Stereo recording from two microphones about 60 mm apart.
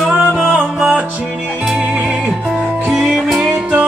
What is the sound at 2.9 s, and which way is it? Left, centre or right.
Music, centre.